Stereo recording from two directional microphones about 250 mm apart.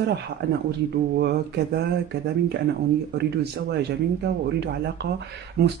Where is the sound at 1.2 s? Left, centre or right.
Right.